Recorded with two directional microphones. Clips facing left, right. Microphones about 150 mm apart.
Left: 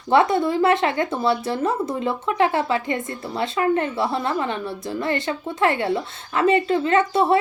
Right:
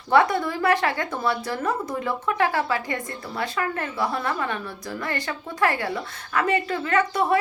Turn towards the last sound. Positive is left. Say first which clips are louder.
# left 4 dB
turn(degrees=25)  # may be behind; listen again after turning